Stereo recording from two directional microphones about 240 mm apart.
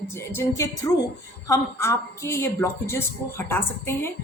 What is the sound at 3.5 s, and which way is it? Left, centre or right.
Speech, centre.